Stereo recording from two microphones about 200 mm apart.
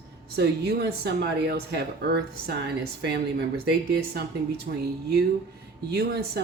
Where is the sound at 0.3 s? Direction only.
55° right (ahead or behind).